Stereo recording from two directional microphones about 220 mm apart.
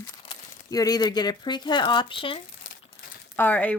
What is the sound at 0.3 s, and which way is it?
Speech, 15° left (ahead or behind).